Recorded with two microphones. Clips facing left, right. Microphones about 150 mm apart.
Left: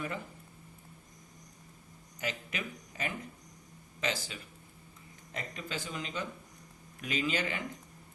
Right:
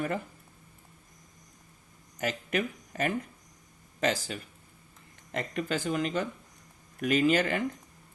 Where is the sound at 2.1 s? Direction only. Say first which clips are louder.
Right 8 dB; 50° right (ahead or behind).